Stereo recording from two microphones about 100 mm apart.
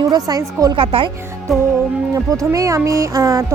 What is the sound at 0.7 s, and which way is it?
Speech, 60° right (ahead or behind).